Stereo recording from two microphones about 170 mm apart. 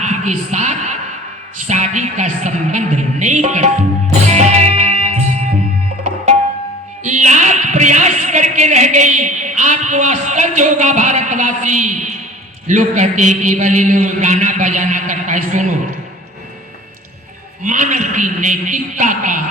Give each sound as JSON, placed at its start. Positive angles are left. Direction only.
{"t": 0.0, "sound": "a sound", "side_deg": -45}
{"t": 1.5, "sound": "a man's voice", "side_deg": -45}
{"t": 4.3, "sound": "music", "side_deg": -40}
{"t": 7.0, "sound": "a woman's voice", "side_deg": -45}
{"t": 17.6, "sound": "a man's voice", "side_deg": -50}